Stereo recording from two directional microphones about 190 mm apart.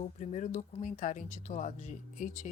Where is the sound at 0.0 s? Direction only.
35° left (ahead or behind).